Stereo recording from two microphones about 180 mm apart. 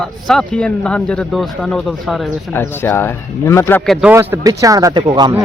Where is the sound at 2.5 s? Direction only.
10° left (ahead or behind).